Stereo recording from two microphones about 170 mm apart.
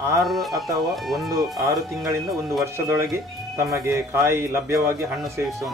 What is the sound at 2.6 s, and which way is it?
A man's voice, 15° right (ahead or behind).